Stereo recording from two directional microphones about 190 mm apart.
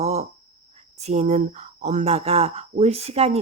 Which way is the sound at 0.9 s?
35° right (ahead or behind).